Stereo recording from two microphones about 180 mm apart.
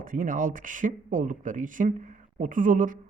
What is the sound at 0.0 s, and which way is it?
Speech, 50° right (ahead or behind).